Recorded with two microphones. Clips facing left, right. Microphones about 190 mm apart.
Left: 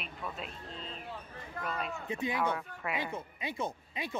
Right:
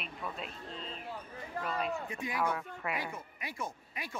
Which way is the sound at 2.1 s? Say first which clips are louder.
Left 5 dB; 25° left (ahead or behind).